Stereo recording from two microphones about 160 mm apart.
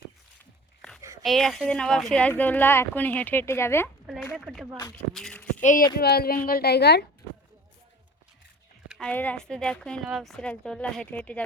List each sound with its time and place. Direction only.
1.2 s speech: centre (ahead or behind)
4.0 s speech: centre (ahead or behind)
5.1 s a sound: 5° left (ahead or behind)
6.0 s a woman's voice: 75° left (ahead or behind)
8.9 s speech: 5° left (ahead or behind)